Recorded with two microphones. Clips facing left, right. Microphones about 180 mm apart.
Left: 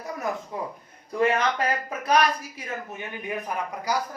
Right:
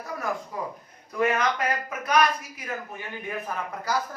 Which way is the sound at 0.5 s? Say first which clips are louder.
Left 1 dB; 25° left (ahead or behind).